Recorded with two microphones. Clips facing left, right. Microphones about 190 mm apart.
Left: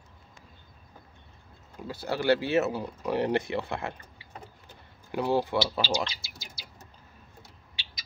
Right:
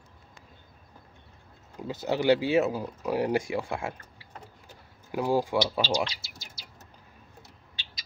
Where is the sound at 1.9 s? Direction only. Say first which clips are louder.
Right 2 dB; 20° right (ahead or behind).